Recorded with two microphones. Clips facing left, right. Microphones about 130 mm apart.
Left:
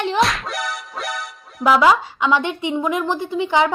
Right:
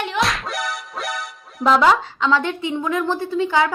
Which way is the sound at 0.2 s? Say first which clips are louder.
Right 1 dB; centre (ahead or behind).